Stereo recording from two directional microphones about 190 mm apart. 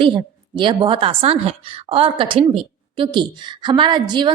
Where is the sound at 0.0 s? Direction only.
25° right (ahead or behind).